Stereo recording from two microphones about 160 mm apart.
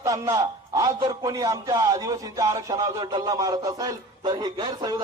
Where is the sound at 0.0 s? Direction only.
20° right (ahead or behind).